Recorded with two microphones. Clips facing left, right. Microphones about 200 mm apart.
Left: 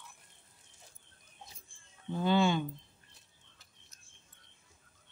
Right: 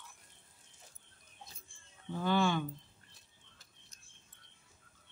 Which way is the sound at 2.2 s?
20° left (ahead or behind).